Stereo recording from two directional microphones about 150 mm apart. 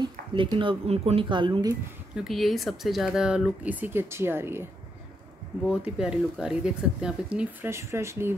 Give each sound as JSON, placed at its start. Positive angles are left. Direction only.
{"t": 0.0, "sound": "speech", "side_deg": -35}
{"t": 2.1, "sound": "speech", "side_deg": 0}
{"t": 5.7, "sound": "speech", "side_deg": -5}
{"t": 7.7, "sound": "speech", "side_deg": -20}